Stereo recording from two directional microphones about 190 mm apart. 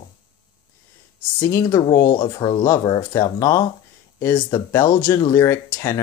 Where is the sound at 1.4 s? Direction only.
15° left (ahead or behind).